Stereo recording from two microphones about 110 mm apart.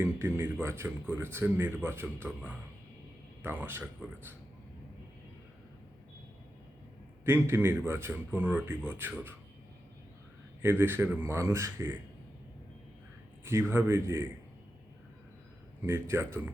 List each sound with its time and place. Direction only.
0.0 s speech: 20° right (ahead or behind)
7.3 s speech: 20° right (ahead or behind)
10.6 s speech: 20° right (ahead or behind)
13.4 s speech: 25° right (ahead or behind)
15.9 s speech: 25° right (ahead or behind)